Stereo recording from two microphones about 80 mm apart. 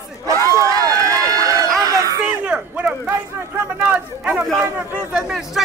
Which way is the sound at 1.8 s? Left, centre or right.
Right.